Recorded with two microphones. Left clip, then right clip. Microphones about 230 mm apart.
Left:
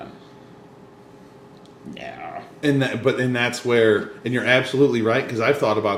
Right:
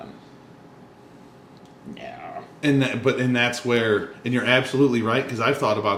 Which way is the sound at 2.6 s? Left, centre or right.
Right.